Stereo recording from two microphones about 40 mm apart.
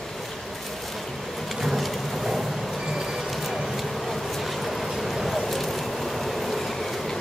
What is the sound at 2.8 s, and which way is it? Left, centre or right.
Vehicle, centre.